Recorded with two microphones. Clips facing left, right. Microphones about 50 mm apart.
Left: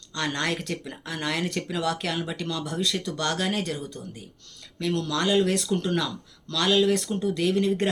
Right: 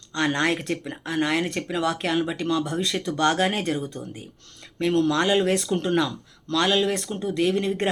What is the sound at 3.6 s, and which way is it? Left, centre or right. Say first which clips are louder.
Speech: right 5 dB; centre.